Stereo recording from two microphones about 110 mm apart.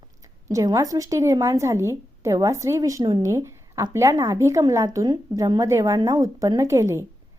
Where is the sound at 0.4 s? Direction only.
30° right (ahead or behind).